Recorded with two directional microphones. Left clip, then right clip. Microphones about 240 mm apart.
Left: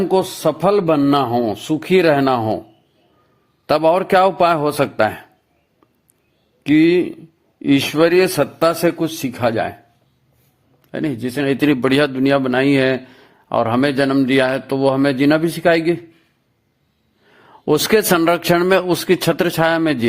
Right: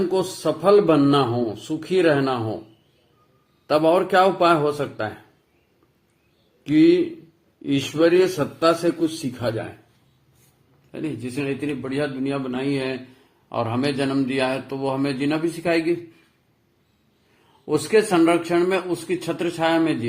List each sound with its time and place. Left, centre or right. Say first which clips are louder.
0.1 s speech: left 6 dB; left
3.7 s a man's voice: left 4 dB; left
6.7 s speech: left 3 dB; left
10.9 s a man's voice: left 7 dB; left
17.7 s a man's voice: left 5 dB; left